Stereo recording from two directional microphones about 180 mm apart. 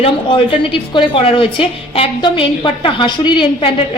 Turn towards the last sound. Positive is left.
turn(degrees=25)  # may be behind; listen again after turning